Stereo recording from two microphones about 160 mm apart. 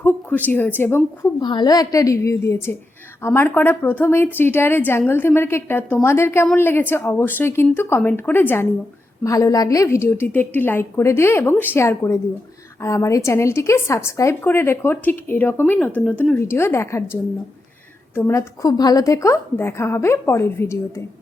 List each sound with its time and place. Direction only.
0.0 s a woman's voice: 10° left (ahead or behind)
1.4 s a woman's voice: 25° left (ahead or behind)